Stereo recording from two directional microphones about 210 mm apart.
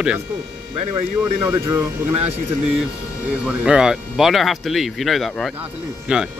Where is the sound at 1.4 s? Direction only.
10° right (ahead or behind).